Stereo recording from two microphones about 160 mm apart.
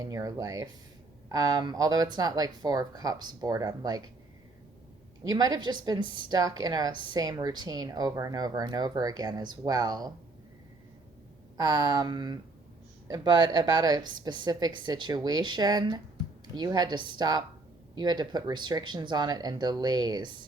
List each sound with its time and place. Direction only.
0.0 s a woman's voice: 20° right (ahead or behind)
5.2 s a woman's voice: 25° right (ahead or behind)
11.5 s a woman's voice: 25° right (ahead or behind)